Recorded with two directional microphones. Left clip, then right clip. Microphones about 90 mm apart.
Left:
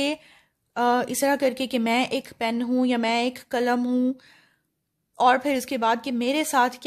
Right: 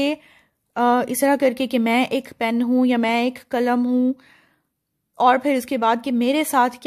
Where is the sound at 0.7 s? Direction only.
40° right (ahead or behind); by 4.1 s 25° right (ahead or behind).